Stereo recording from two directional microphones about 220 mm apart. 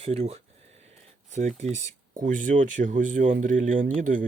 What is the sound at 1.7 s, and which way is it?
Speech, 35° right (ahead or behind).